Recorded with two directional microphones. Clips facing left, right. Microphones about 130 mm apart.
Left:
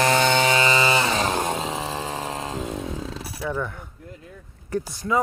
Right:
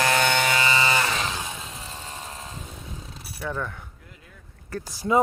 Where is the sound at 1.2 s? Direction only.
55° left (ahead or behind); by 3.3 s 90° left.